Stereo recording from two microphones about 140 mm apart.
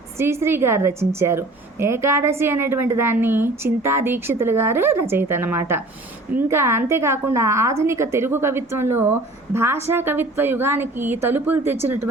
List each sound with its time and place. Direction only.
0.2 s a woman's voice: 20° right (ahead or behind)